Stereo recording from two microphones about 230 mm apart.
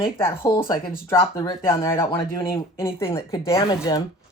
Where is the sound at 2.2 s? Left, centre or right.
Left.